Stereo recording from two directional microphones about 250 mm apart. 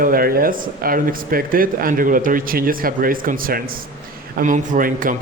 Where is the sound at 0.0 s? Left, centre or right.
Right.